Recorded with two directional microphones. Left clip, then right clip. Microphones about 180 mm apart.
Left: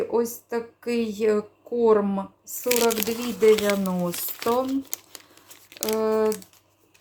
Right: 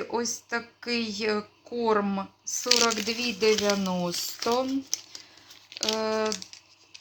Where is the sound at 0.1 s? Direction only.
10° left (ahead or behind).